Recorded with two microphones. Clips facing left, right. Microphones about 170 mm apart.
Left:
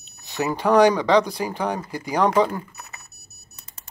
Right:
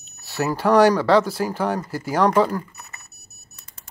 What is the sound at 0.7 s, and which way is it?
Speech, 15° left (ahead or behind).